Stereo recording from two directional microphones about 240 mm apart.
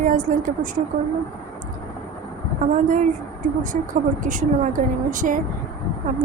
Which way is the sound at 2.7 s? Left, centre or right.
Right.